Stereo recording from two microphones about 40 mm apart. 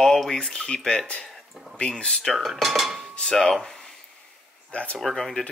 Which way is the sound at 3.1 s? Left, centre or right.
Centre.